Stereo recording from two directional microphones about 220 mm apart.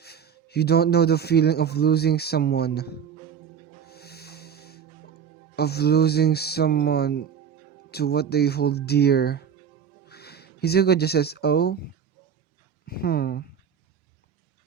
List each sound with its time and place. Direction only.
0.0 s a man's voice: 45° left (ahead or behind)
3.8 s snort: 45° left (ahead or behind)
5.5 s a man's voice: 45° left (ahead or behind)
12.8 s speech: 45° left (ahead or behind)